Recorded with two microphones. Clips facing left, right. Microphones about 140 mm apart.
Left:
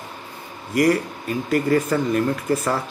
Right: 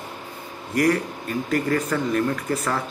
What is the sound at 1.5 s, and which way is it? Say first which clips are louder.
Speech: left 4 dB; 5° left (ahead or behind).